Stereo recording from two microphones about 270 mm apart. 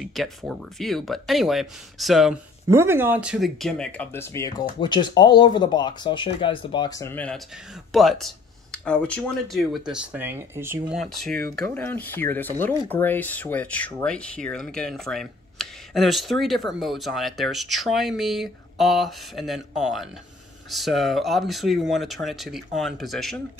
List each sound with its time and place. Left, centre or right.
0.0 s speech: centre